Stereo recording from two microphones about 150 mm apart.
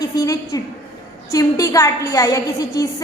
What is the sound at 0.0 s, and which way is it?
A woman's voice, 25° left (ahead or behind).